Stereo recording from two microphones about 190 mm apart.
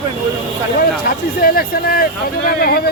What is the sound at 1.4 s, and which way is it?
Speech, 50° left (ahead or behind).